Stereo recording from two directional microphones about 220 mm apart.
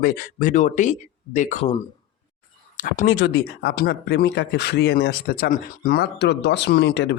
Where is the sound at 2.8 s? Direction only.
40° left (ahead or behind).